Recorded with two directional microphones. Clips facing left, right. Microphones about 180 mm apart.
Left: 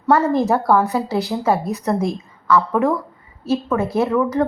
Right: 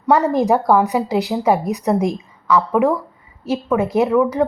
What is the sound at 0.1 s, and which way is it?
Speech, 15° right (ahead or behind).